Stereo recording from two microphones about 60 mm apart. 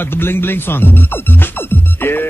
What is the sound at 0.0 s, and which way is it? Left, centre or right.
Speech, left.